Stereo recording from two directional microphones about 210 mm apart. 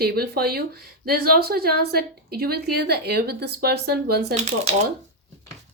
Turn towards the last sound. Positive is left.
turn(degrees=-30)  # may be behind; listen again after turning